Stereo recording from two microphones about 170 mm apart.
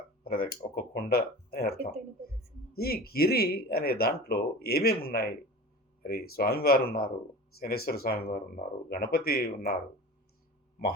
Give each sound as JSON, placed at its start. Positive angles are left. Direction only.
{"t": 0.3, "sound": "speech", "side_deg": 65}